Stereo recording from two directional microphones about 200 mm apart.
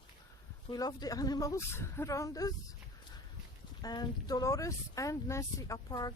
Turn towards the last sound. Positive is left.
turn(degrees=20)  # may be behind; listen again after turning